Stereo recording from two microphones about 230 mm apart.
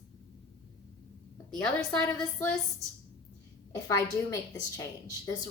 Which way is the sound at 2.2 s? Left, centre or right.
Centre.